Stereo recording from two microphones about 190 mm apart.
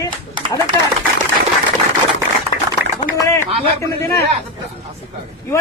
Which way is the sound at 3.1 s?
15° left (ahead or behind).